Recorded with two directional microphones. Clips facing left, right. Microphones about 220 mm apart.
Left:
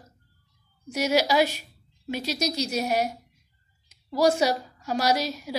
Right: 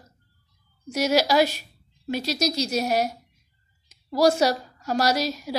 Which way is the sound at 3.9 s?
40° right (ahead or behind).